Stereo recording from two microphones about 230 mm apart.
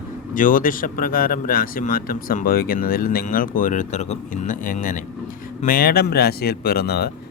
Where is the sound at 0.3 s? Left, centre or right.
Left.